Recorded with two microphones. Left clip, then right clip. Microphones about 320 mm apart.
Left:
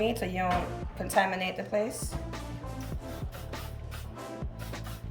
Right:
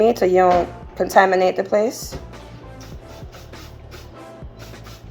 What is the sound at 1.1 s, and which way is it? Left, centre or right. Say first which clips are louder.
Speech: right 13 dB; right.